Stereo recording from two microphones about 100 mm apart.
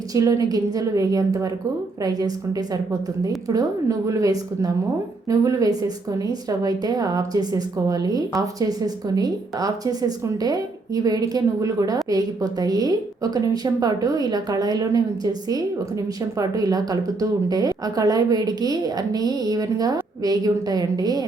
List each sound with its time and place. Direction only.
0.1 s a woman's voice: 35° right (ahead or behind)